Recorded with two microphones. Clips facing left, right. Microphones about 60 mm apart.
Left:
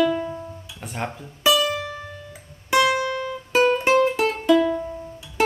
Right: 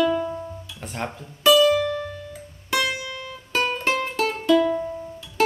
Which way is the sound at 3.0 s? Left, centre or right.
Left.